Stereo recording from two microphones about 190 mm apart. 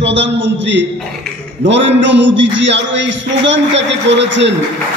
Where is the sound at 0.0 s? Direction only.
70° right (ahead or behind).